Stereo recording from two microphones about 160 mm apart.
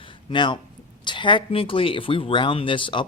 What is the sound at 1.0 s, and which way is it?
Speech, 30° left (ahead or behind).